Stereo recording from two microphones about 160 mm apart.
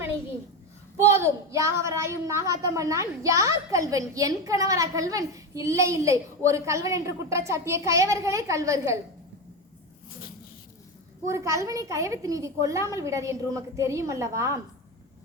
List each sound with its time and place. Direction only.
0.9 s a woman's voice: 15° right (ahead or behind)
11.3 s a woman's voice: 20° right (ahead or behind)